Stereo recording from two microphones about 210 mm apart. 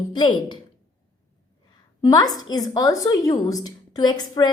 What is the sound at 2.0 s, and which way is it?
A woman's voice, 20° left (ahead or behind).